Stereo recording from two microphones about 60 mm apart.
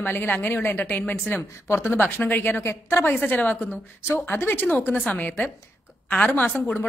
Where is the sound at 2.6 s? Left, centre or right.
Left.